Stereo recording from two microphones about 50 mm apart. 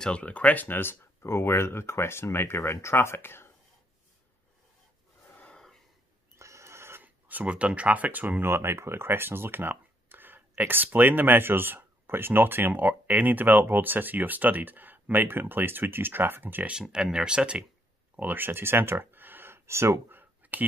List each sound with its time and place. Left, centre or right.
0.0 s speech: left
6.3 s a sound: right
7.0 s speech: right
8.4 s speech: right
16.9 s speech: centre
18.2 s speech: right
20.1 s a sound: right